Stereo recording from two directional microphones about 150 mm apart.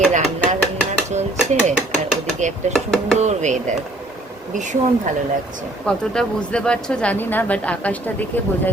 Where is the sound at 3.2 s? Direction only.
50° right (ahead or behind).